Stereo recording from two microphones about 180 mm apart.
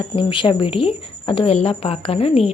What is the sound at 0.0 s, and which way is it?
A woman's voice, 30° left (ahead or behind).